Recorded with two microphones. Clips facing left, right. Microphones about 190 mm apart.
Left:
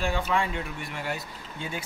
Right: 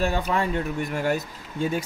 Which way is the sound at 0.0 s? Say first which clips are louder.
Right 3 dB; 40° right (ahead or behind).